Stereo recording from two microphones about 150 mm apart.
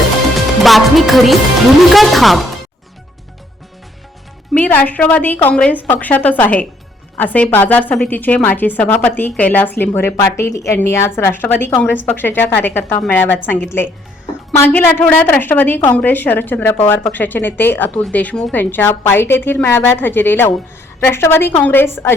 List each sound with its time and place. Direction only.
0.6 s music: centre (ahead or behind)
1.9 s speech: centre (ahead or behind)
4.5 s a woman's voice: 10° left (ahead or behind)